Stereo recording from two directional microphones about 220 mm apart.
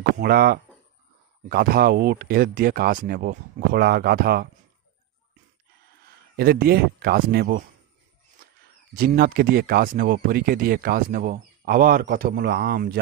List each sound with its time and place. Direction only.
0.2 s speech: 45° right (ahead or behind)
6.3 s speech: 45° right (ahead or behind)
8.9 s speech: 45° right (ahead or behind)